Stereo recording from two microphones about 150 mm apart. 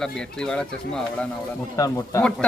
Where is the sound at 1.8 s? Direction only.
20° left (ahead or behind).